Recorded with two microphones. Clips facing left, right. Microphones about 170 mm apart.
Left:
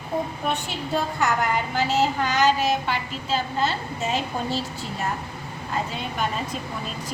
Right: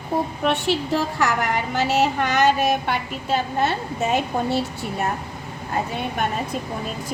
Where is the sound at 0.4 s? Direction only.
80° right.